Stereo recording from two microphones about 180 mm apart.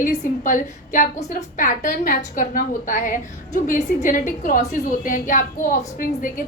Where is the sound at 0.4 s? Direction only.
45° left (ahead or behind).